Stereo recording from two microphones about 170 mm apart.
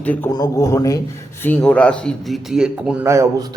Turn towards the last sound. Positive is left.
turn(degrees=-20)  # may be behind; listen again after turning